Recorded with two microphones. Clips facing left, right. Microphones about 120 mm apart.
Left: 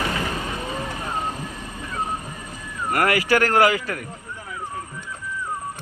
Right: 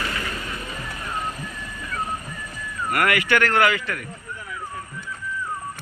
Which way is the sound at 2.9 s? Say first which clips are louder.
Left 2 dB; 30° left (ahead or behind).